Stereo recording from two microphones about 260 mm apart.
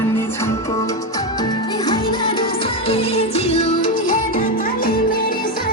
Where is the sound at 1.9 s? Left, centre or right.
Centre.